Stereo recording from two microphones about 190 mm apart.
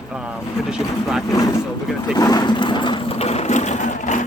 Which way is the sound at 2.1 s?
20° left (ahead or behind).